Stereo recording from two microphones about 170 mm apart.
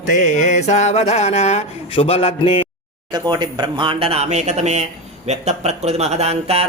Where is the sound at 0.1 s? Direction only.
45° left (ahead or behind).